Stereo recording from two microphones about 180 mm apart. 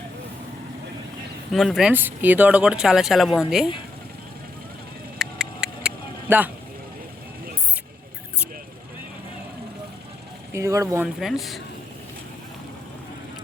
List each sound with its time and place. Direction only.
1.5 s speech: centre (ahead or behind)
1.9 s speech: 10° right (ahead or behind)
5.1 s a sound: centre (ahead or behind)
10.5 s speech: 15° right (ahead or behind)
11.2 s speech: centre (ahead or behind)